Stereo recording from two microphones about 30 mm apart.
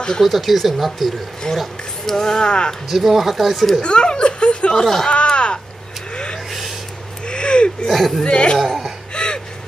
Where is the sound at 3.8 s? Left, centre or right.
Left.